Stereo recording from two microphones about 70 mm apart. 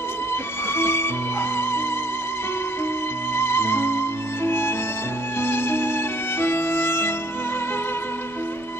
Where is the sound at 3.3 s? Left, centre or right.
Left.